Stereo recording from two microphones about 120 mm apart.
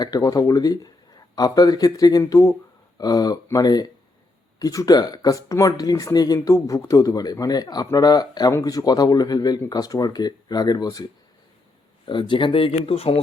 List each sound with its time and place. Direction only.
0.0 s speech: 30° left (ahead or behind); by 13.1 s 55° left (ahead or behind)